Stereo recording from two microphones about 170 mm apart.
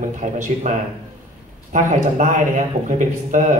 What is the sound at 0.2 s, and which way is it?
A man's voice, 45° right (ahead or behind).